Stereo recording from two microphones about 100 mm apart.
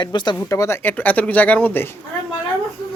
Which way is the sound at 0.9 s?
15° left (ahead or behind).